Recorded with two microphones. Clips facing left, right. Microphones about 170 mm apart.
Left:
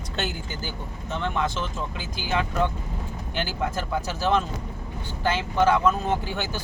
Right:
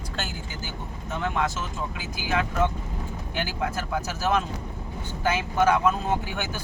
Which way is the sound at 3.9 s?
5° right (ahead or behind).